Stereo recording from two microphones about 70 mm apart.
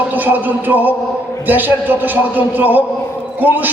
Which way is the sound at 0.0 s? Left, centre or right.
Right.